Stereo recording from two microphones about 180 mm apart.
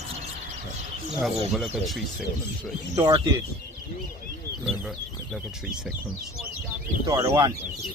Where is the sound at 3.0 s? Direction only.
25° right (ahead or behind).